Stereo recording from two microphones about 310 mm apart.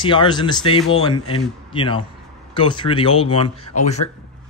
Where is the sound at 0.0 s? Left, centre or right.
Centre.